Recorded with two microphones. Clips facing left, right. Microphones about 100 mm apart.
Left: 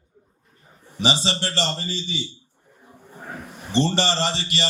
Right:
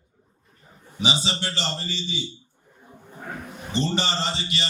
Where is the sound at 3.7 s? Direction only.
70° left (ahead or behind).